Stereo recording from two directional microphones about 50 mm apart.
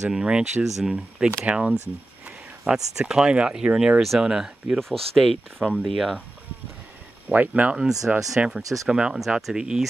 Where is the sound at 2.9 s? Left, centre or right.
Centre.